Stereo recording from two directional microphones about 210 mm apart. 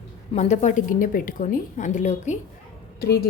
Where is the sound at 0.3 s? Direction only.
35° left (ahead or behind).